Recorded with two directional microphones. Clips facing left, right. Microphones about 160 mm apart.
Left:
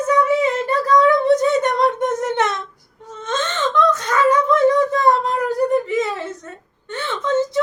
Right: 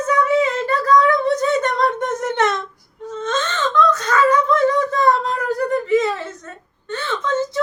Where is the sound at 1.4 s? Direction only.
15° left (ahead or behind).